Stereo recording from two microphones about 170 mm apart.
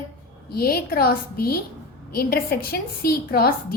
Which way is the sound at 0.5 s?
65° left (ahead or behind).